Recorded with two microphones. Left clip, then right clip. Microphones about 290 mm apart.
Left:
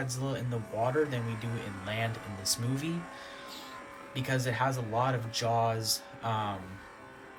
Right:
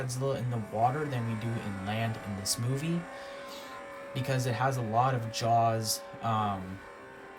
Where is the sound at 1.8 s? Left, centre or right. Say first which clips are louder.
Even; centre.